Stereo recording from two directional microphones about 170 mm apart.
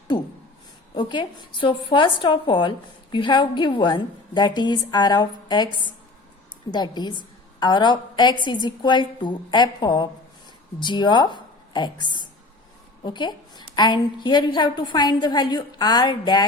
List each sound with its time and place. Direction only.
0.9 s a woman's voice: 25° left (ahead or behind)